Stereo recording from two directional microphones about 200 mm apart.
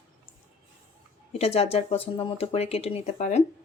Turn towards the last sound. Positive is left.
turn(degrees=35)  # may be behind; listen again after turning